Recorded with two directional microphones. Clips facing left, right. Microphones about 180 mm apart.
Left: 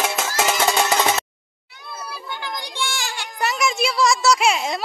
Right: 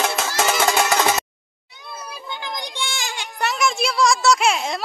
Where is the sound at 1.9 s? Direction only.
20° right (ahead or behind).